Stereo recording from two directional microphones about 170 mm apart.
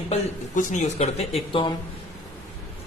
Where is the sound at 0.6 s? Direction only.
45° left (ahead or behind); by 1.8 s 30° left (ahead or behind).